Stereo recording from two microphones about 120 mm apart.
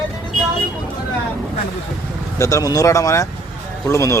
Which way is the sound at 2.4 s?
25° left (ahead or behind).